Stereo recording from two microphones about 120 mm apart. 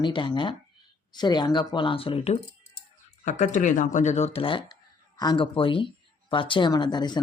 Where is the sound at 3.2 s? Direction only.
80° left.